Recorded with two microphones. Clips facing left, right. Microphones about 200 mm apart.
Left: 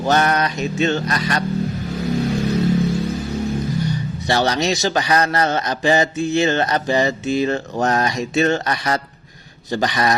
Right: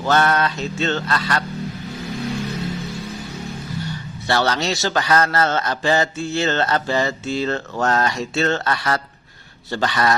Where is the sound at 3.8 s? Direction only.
15° left (ahead or behind).